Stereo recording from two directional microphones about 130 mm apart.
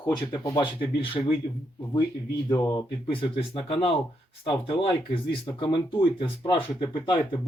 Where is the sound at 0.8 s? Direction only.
45° left (ahead or behind).